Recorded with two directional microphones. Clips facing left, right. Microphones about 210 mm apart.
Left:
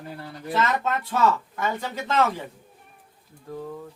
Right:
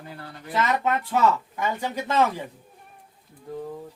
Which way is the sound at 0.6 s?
15° right (ahead or behind).